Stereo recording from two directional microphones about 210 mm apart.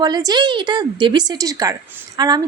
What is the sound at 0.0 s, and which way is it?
A woman's voice, 20° right (ahead or behind).